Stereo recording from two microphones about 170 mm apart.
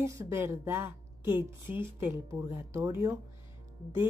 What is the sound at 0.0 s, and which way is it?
Speech, 15° right (ahead or behind).